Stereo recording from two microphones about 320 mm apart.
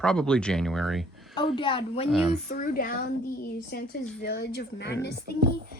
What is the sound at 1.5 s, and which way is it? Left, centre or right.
Speech, centre.